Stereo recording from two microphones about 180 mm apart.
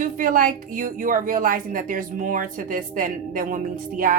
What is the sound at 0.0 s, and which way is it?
A woman's voice, 50° right (ahead or behind).